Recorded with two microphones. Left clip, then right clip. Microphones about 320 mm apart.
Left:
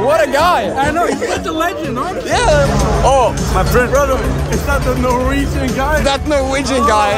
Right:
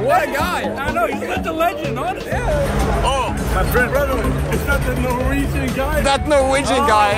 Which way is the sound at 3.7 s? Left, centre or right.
Centre.